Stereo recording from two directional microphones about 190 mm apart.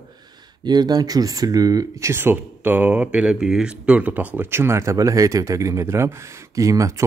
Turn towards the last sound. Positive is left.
turn(degrees=-15)  # may be behind; listen again after turning